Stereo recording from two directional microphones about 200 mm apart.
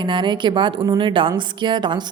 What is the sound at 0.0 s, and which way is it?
A woman's voice, 25° right (ahead or behind).